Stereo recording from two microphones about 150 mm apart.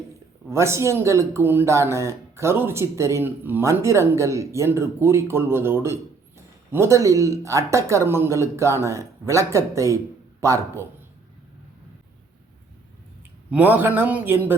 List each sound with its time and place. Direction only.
0.5 s speech: 20° right (ahead or behind)
13.5 s a man's voice: 10° right (ahead or behind)